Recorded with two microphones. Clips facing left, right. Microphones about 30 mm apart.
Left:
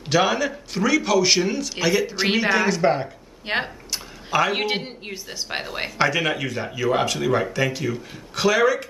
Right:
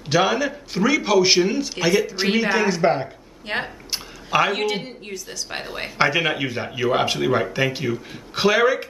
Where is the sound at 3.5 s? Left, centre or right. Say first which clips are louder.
Left 2 dB; left.